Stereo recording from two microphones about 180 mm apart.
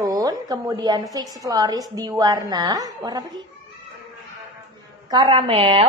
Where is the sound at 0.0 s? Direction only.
20° right (ahead or behind).